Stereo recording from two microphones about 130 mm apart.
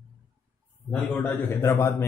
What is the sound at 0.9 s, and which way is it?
A man's voice, 15° left (ahead or behind).